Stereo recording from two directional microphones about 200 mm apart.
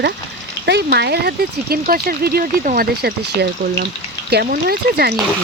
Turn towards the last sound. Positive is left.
turn(degrees=-50)  # may be behind; listen again after turning